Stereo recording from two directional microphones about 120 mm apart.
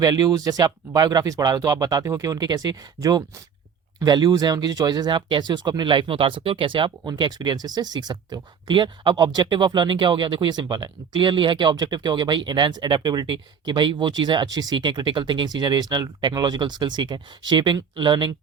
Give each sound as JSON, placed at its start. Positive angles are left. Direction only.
{"t": 0.0, "sound": "speech", "side_deg": -35}